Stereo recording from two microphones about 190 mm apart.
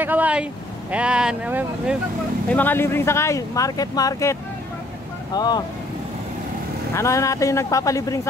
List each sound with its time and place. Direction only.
0.0 s speech: 10° right (ahead or behind)
2.5 s speech: 10° left (ahead or behind)
6.9 s speech: 15° left (ahead or behind)